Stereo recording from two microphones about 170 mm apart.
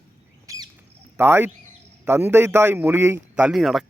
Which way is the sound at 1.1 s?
15° right (ahead or behind).